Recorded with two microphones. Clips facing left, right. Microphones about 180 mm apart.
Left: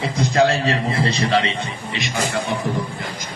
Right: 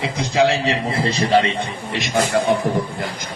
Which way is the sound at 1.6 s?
60° right (ahead or behind).